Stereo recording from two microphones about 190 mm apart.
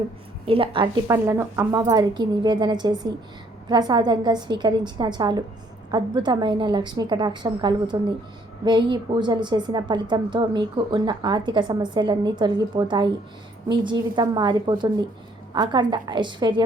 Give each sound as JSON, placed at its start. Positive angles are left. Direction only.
{"t": 0.4, "sound": "a woman's voice", "side_deg": -30}
{"t": 1.0, "sound": "a woman's voice", "side_deg": -15}